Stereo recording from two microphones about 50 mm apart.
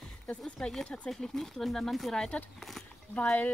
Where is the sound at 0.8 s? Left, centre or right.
Left.